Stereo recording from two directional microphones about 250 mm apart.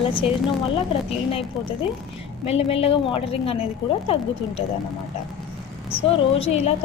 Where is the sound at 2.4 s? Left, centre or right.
Left.